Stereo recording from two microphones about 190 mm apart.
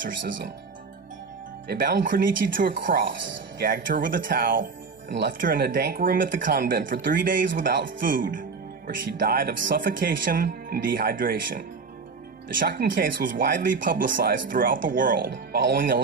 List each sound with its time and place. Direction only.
1.6 s speech: 55° right (ahead or behind)
5.0 s speech: 65° right (ahead or behind)
5.4 s speech: 50° right (ahead or behind)